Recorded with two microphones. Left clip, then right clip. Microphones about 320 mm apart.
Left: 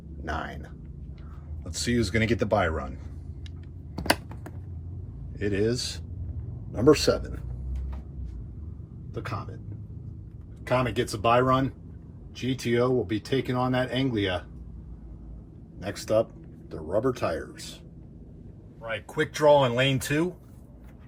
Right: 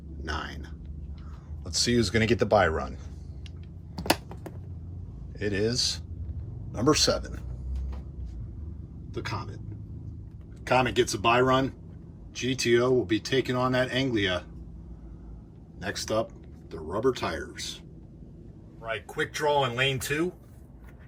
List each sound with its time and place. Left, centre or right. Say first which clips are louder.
0.2 s speech: left 2 dB; centre
5.4 s speech: even; centre
9.1 s speech: even; centre
10.6 s speech: right 2 dB; centre
15.8 s speech: left 4 dB; centre
18.8 s speech: left 2 dB; centre